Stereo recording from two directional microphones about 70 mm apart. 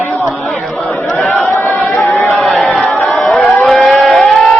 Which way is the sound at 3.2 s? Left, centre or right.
Centre.